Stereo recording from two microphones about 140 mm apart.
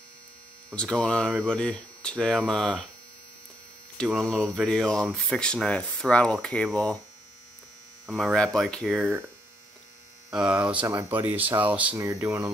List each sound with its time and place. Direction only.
0.7 s hum: 5° left (ahead or behind)
1.4 s speech: 5° left (ahead or behind)
4.0 s speech: 5° left (ahead or behind)
8.1 s speech: centre (ahead or behind)
10.3 s speech: 5° right (ahead or behind)